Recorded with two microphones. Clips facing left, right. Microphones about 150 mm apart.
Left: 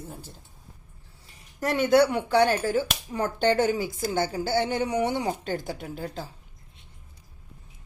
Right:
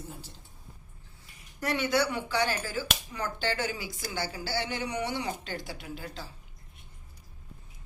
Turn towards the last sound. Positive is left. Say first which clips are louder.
# left 6 dB
turn(degrees=45)  # may be behind; listen again after turning